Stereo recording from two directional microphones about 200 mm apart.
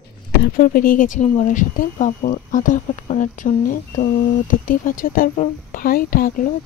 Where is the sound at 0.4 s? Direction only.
45° left (ahead or behind).